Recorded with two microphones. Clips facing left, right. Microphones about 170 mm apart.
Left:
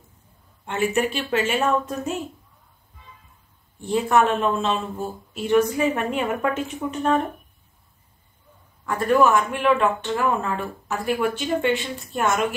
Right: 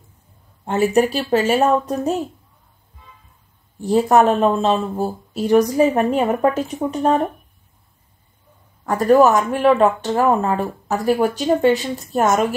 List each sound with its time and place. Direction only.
0.7 s speech: 40° right (ahead or behind)
3.8 s speech: 40° right (ahead or behind)
8.8 s speech: 40° right (ahead or behind)